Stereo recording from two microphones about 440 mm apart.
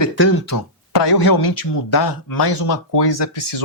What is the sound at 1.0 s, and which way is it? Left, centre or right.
Speech, left.